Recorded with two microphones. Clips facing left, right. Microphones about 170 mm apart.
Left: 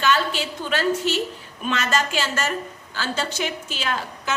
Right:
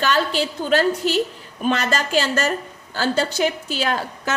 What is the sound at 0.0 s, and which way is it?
A woman's voice, 40° right (ahead or behind).